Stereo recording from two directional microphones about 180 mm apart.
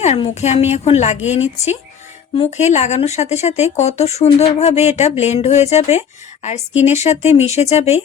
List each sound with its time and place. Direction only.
0.3 s speech: 35° left (ahead or behind)